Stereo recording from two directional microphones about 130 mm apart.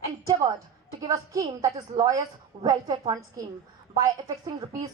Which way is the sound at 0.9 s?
30° right (ahead or behind).